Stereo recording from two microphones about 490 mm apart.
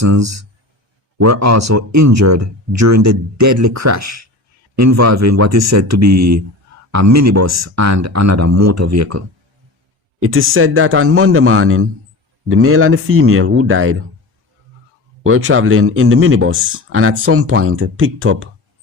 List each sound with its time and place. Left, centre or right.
0.0 s speech: right
15.2 s speech: right